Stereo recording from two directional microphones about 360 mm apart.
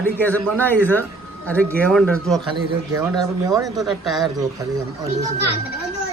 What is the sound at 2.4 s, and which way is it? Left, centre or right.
A man's voice, centre.